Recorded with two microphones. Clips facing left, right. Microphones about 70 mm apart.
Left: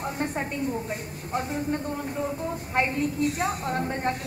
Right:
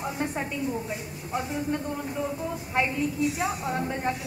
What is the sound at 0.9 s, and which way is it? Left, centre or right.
Speech, left.